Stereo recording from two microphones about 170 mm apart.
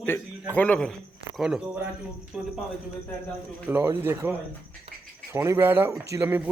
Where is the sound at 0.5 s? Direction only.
10° left (ahead or behind).